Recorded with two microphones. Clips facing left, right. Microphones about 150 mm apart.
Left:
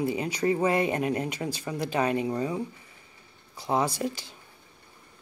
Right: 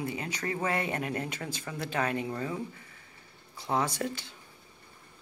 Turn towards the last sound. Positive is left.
turn(degrees=10)  # may be behind; listen again after turning